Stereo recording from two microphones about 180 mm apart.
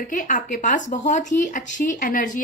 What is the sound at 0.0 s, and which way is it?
A woman's voice, 45° left (ahead or behind).